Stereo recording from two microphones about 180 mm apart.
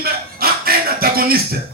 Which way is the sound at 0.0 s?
55° right (ahead or behind).